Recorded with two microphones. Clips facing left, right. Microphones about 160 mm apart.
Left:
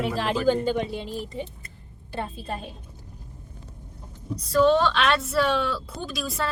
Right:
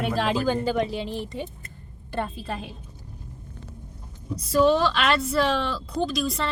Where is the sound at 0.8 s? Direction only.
90° right.